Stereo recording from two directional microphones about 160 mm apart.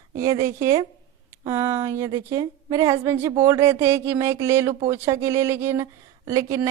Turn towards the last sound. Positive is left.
turn(degrees=-20)  # may be behind; listen again after turning